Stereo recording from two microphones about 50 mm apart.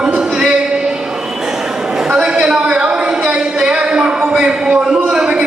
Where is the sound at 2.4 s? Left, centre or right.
Centre.